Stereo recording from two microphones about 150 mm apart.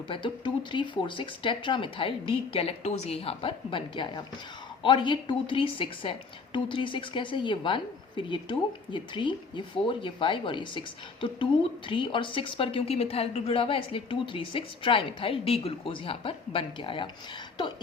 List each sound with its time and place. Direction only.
0.1 s speech: 35° left (ahead or behind)